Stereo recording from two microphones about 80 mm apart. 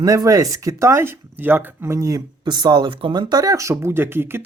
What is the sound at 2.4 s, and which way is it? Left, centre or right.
Speech, right.